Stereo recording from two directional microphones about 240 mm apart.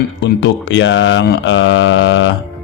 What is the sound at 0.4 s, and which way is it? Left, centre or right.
A man's voice, left.